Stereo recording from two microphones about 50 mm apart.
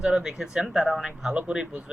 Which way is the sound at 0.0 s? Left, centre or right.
Centre.